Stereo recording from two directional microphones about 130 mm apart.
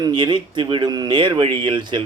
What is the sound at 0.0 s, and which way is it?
Speech, 35° right (ahead or behind).